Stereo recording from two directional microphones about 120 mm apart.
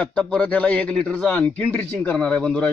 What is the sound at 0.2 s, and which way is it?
A man's voice, 10° left (ahead or behind).